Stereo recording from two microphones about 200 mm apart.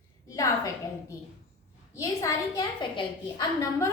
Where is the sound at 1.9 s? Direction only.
15° left (ahead or behind).